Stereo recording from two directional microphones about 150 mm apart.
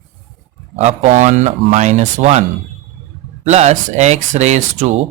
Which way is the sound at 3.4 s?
50° right (ahead or behind).